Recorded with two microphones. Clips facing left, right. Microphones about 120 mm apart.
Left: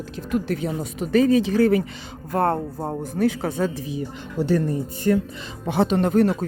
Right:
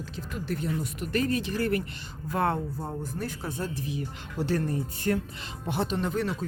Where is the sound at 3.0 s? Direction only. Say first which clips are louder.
Left 12 dB; 75° left (ahead or behind); by 3.7 s 90° left.